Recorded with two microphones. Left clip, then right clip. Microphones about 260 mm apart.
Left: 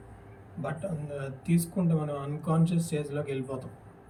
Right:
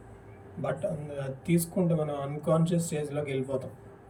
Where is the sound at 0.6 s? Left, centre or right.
Centre.